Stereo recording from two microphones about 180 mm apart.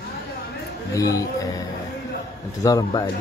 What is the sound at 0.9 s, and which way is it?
Speech, 20° left (ahead or behind).